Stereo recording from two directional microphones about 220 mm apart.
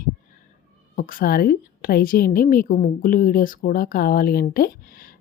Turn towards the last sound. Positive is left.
turn(degrees=40)  # may be behind; listen again after turning